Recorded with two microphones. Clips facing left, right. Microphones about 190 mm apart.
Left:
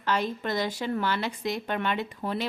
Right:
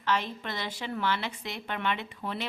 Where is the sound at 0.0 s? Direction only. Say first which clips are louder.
Left 3 dB; 40° left (ahead or behind).